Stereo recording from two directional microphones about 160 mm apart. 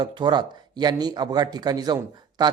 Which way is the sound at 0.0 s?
30° right (ahead or behind).